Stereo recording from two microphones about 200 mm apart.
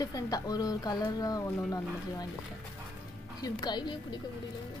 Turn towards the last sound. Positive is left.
turn(degrees=20)  # may be behind; listen again after turning